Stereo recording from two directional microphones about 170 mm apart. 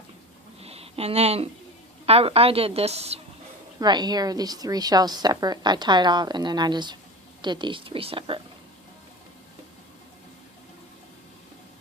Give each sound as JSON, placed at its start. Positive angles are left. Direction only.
{"t": 0.6, "sound": "a sound", "side_deg": -35}
{"t": 2.0, "sound": "a woman's voice", "side_deg": -35}
{"t": 3.8, "sound": "a woman's voice", "side_deg": -25}